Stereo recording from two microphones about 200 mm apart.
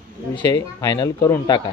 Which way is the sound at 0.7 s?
15° left (ahead or behind).